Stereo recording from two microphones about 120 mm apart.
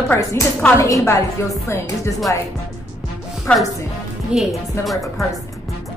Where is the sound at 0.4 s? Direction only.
25° left (ahead or behind).